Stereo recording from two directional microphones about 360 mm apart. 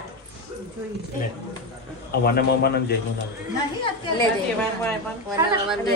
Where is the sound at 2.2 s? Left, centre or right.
Left.